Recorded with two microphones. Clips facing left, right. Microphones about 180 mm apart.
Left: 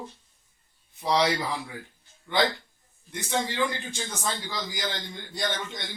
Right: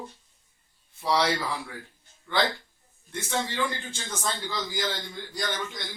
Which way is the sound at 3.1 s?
15° left (ahead or behind).